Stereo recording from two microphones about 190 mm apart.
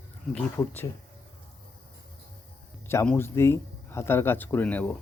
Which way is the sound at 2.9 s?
15° left (ahead or behind).